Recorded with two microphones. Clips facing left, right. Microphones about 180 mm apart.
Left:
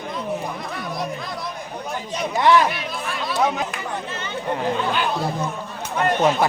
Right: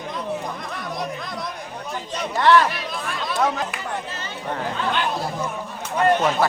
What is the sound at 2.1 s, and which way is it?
Speech, 10° left (ahead or behind).